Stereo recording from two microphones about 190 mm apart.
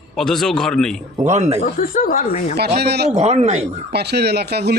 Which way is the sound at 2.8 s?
60° right (ahead or behind).